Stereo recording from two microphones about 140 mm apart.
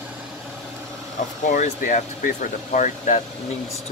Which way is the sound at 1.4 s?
70° left (ahead or behind).